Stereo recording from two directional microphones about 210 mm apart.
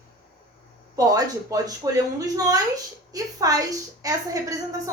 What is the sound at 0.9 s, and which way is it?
A woman's voice, 15° right (ahead or behind).